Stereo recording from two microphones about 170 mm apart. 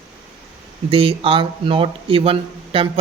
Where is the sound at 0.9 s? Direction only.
30° right (ahead or behind).